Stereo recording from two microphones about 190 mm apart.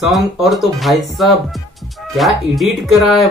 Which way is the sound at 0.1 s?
Centre (ahead or behind).